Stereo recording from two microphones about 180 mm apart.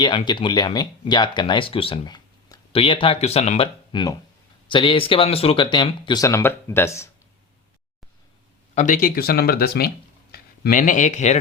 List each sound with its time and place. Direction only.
0.0 s speech: 25° left (ahead or behind)
3.9 s speech: 25° left (ahead or behind)
8.7 s speech: 45° left (ahead or behind)